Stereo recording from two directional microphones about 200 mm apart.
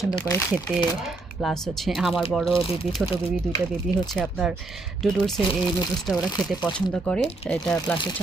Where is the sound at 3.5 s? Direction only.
5° right (ahead or behind).